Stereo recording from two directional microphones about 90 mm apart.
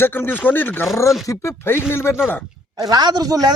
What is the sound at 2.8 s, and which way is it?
Speech, 50° right (ahead or behind).